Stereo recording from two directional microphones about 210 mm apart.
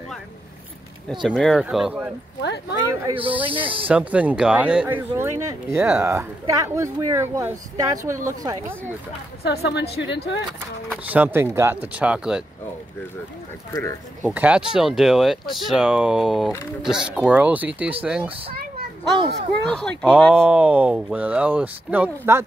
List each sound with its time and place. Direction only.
1.2 s speech: centre (ahead or behind)
2.9 s speech: 20° right (ahead or behind)
3.8 s speech: 5° right (ahead or behind)
9.4 s a woman's voice: 50° left (ahead or behind)
10.9 s speech: 5° right (ahead or behind)
14.2 s speech: 5° right (ahead or behind)
19.6 s speech: 5° left (ahead or behind)